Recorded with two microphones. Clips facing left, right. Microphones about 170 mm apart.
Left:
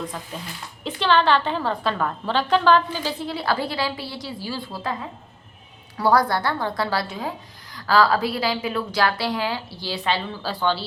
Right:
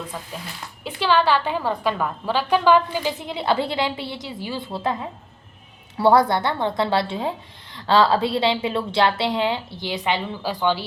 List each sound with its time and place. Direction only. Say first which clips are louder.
0.9 s a woman's voice: even; 10° right (ahead or behind)
6.0 s a woman's voice: right 3 dB; 25° right (ahead or behind)